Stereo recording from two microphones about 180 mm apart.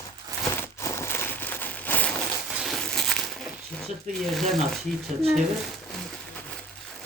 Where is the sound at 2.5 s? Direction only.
Centre (ahead or behind).